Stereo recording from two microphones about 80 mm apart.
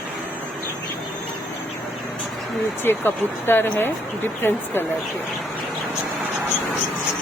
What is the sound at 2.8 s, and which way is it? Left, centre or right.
Speech, left.